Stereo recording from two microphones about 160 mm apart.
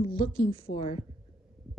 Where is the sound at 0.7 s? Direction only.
65° left (ahead or behind).